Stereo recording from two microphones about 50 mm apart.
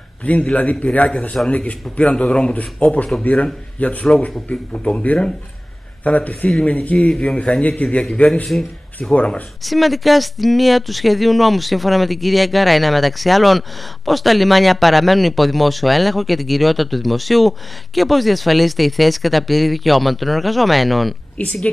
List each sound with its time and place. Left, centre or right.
0.2 s a man's voice: left
8.5 s speech: centre
9.1 s a man's voice: left
9.6 s speech: centre
21.4 s speech: left